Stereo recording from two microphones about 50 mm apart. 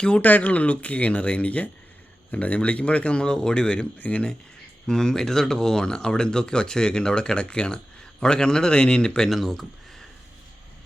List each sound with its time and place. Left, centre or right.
0.2 s speech: left
4.9 s speech: centre
9.3 s speech: centre